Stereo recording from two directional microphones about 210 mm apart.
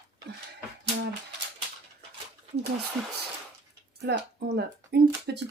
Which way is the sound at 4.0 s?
55° right (ahead or behind).